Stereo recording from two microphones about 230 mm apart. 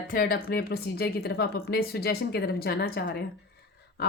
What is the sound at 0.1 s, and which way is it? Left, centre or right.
A woman's voice, left.